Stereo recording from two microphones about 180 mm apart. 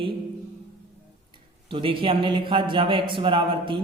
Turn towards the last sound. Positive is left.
turn(degrees=-25)  # may be behind; listen again after turning